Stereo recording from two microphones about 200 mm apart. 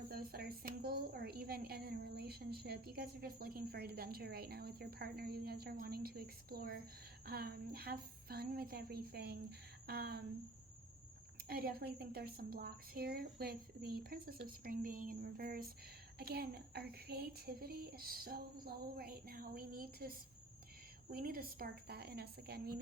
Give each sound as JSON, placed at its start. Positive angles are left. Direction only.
{"t": 0.1, "sound": "a woman's voice", "side_deg": -50}
{"t": 11.4, "sound": "a woman's voice", "side_deg": -50}